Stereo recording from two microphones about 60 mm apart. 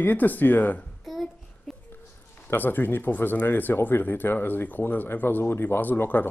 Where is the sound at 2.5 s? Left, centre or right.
Left.